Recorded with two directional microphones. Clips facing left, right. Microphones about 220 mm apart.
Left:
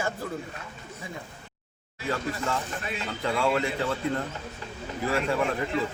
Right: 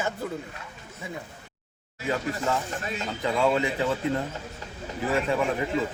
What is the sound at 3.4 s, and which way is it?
Speech, 20° right (ahead or behind).